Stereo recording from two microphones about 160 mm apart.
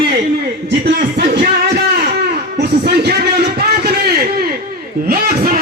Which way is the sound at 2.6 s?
85° right.